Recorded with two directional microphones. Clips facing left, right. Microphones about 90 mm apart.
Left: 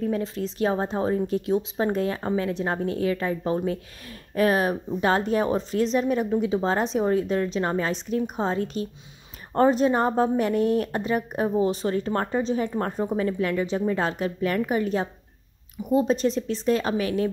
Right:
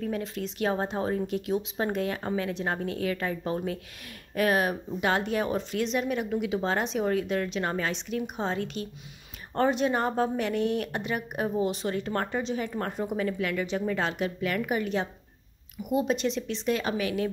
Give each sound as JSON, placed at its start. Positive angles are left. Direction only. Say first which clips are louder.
{"t": 0.0, "sound": "a woman's voice", "louder": "left 5 dB", "side_deg": 35}